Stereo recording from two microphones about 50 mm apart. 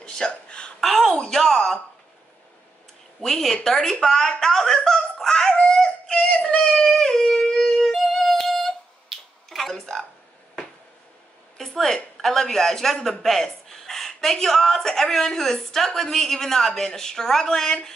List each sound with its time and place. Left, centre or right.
0.0 s hiccup: centre
0.7 s a woman's voice: centre
3.2 s a woman's voice: centre
7.0 s a sound: centre
11.5 s speech: centre